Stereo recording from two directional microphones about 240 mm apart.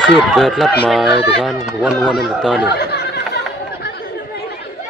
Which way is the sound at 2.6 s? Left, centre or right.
Left.